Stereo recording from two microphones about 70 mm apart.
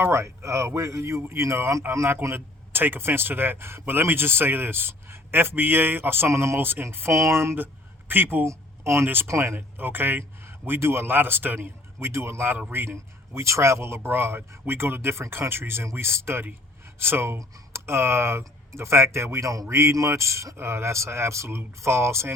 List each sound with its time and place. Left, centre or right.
0.0 s a man's voice: right
7.1 s a man's voice: right
7.5 s speech: right
8.4 s a man's voice: right
9.6 s speech: right
11.9 s a man's voice: right
19.6 s a man's voice: right